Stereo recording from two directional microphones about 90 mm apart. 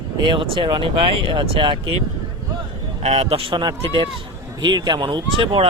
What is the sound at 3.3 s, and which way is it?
Speech, 70° right (ahead or behind).